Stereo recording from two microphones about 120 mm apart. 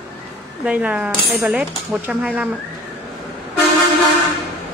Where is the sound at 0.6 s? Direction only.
10° right (ahead or behind).